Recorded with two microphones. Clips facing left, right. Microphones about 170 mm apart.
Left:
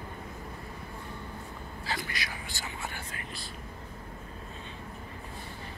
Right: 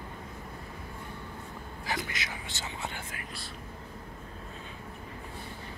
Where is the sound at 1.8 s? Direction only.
20° right (ahead or behind).